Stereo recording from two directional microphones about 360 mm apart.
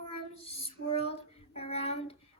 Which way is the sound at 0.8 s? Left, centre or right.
Left.